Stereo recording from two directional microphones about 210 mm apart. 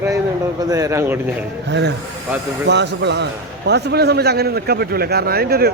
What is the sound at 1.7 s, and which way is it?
A man's voice, 55° right (ahead or behind).